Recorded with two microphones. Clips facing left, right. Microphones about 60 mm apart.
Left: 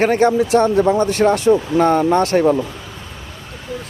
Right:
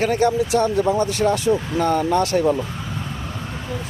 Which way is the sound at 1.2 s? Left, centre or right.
Left.